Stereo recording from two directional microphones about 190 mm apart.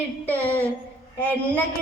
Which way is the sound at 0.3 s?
10° left (ahead or behind).